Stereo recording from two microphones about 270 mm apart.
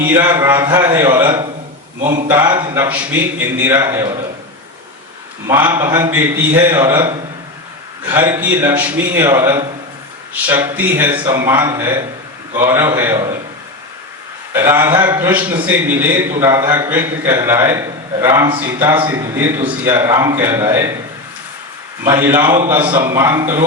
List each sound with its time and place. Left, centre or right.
0.0 s a man's voice: centre
2.0 s speech: right
2.2 s a man's voice: centre
5.5 s a man's voice: centre
14.5 s a man's voice: centre
22.0 s a man's voice: centre